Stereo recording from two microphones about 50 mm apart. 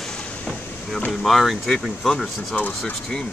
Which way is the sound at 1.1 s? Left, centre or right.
Centre.